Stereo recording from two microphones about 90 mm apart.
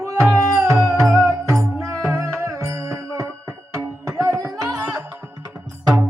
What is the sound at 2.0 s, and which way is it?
Music, 35° right (ahead or behind).